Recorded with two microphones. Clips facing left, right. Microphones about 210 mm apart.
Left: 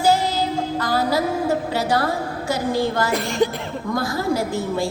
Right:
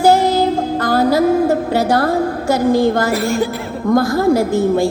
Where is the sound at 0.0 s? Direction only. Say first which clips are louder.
Right 7 dB; 55° right (ahead or behind).